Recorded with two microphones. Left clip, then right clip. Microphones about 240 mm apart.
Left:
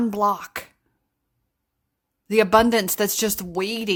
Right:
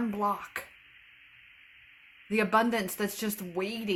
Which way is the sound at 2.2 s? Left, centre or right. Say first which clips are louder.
Left 10 dB; left.